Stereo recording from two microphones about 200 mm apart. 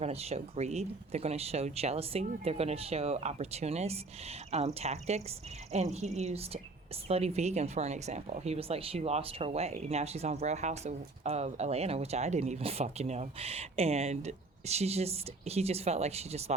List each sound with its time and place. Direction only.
0.0 s speech: 30° right (ahead or behind)